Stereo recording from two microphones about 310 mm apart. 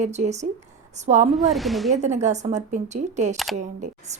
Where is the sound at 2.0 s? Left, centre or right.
Right.